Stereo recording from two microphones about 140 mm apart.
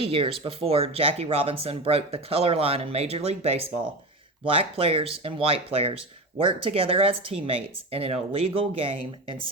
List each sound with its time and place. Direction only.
0.0 s speech: 40° right (ahead or behind)